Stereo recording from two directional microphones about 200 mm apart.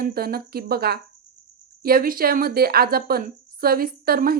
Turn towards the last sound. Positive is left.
turn(degrees=-50)  # may be behind; listen again after turning